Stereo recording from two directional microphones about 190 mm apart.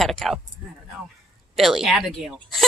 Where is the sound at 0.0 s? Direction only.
Centre (ahead or behind).